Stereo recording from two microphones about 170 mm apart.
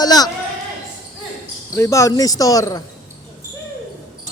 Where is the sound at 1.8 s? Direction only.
20° left (ahead or behind).